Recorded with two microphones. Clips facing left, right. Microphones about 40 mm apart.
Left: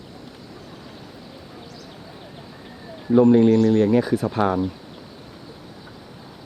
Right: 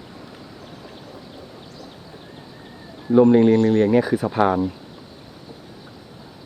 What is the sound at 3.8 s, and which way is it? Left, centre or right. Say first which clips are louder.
Speech: right 1 dB; centre.